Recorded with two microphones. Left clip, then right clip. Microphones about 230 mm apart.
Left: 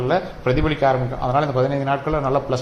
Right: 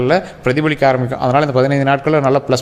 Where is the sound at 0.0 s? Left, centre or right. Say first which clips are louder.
Right 6 dB; right.